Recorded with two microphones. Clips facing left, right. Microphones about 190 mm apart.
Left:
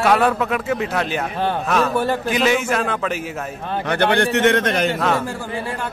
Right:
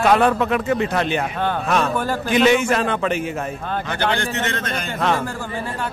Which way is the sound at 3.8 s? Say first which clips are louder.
Left 7 dB; 60° left (ahead or behind).